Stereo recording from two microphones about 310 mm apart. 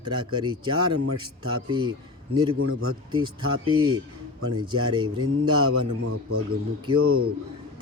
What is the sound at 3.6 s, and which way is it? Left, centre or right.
Speech, centre.